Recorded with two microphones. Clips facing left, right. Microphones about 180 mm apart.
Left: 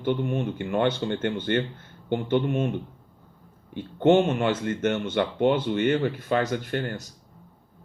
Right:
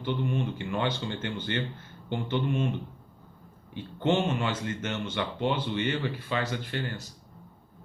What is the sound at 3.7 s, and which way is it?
Speech, 55° left (ahead or behind).